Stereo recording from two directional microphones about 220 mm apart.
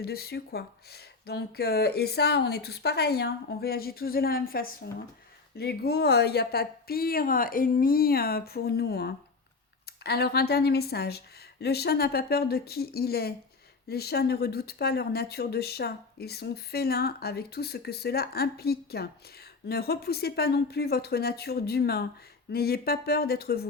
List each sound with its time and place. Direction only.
0.0 s speech: 45° left (ahead or behind)